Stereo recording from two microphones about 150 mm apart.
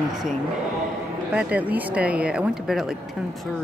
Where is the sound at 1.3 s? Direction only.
10° right (ahead or behind).